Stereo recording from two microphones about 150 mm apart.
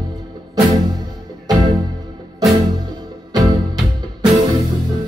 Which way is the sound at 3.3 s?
25° right (ahead or behind).